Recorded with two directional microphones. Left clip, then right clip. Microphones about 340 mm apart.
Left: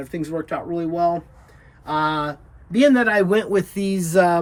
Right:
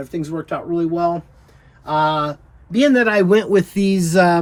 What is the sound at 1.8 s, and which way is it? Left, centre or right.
Speech, centre.